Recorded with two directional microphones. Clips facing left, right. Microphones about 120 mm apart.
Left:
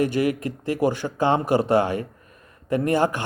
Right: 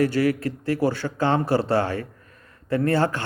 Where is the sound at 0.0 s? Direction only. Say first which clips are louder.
Right 1 dB; 20° left (ahead or behind).